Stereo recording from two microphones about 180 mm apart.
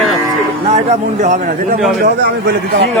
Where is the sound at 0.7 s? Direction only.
40° right (ahead or behind).